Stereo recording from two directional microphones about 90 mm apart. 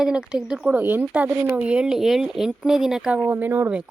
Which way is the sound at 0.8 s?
20° right (ahead or behind).